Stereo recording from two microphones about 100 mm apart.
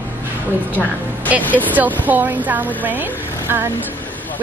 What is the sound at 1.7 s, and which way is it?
A woman's voice, 15° right (ahead or behind).